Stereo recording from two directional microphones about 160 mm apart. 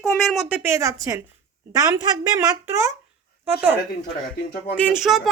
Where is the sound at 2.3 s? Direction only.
20° right (ahead or behind).